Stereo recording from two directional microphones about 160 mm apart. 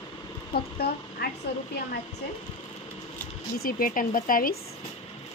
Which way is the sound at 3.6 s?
60° left (ahead or behind).